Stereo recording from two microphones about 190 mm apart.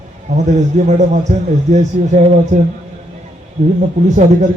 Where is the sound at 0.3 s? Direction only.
40° right (ahead or behind).